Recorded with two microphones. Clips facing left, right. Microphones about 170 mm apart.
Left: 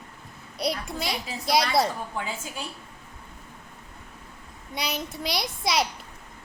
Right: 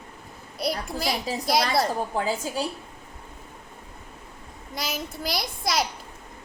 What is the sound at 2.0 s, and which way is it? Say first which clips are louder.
Speech: right 7 dB; 35° right (ahead or behind).